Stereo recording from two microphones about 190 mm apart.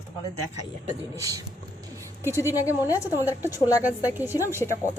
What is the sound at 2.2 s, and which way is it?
Speech, 15° left (ahead or behind).